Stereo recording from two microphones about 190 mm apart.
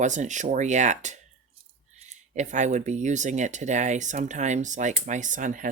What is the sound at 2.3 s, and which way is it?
Speech, 40° right (ahead or behind).